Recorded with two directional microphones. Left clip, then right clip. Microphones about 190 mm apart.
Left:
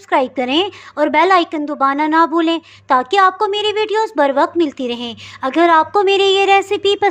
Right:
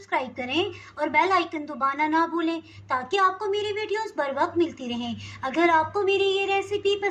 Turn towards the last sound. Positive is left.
turn(degrees=50)  # may be behind; listen again after turning